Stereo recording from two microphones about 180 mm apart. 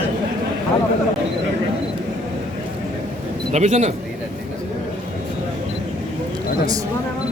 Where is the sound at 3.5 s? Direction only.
40° right (ahead or behind).